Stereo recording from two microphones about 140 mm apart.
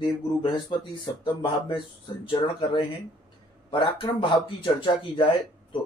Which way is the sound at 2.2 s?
40° left (ahead or behind).